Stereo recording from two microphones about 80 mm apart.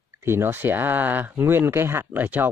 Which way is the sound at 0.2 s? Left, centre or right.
Right.